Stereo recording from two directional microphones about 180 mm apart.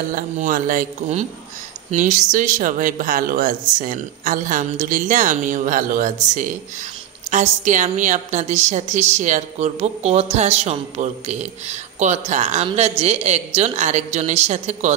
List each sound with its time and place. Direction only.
0.1 s speech: 50° right (ahead or behind)
7.2 s a woman's voice: 40° right (ahead or behind)